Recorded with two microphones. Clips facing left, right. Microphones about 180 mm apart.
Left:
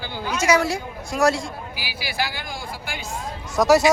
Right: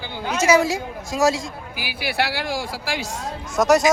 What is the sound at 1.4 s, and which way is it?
A man's voice, 55° right (ahead or behind).